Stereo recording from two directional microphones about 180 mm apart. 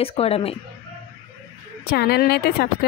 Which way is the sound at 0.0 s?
35° left (ahead or behind).